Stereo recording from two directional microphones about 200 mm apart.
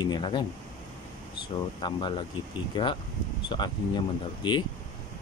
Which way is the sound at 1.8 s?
20° left (ahead or behind).